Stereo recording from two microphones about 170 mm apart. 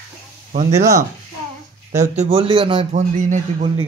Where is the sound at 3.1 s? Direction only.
50° right (ahead or behind).